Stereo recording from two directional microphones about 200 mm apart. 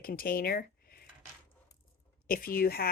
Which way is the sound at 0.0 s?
45° left (ahead or behind).